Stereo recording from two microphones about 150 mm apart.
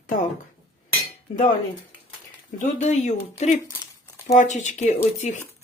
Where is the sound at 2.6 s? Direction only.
50° left (ahead or behind).